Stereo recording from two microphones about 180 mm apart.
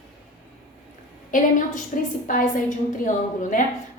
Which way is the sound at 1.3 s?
45° left (ahead or behind).